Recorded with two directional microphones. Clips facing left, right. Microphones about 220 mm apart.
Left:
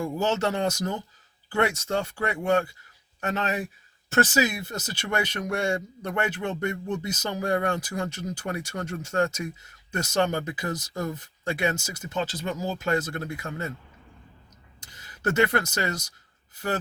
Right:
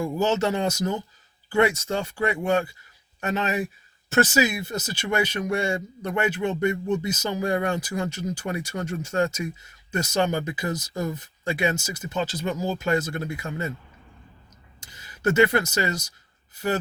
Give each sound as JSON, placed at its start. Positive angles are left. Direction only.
{"t": 0.0, "sound": "speech", "side_deg": -10}
{"t": 14.8, "sound": "speech", "side_deg": -10}